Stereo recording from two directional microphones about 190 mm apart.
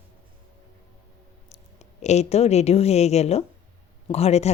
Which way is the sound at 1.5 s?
35° left (ahead or behind).